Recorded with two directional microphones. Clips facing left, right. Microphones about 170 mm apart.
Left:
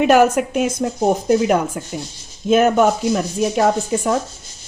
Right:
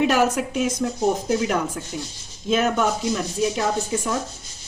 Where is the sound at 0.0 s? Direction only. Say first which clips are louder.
Left 6 dB; 60° left (ahead or behind).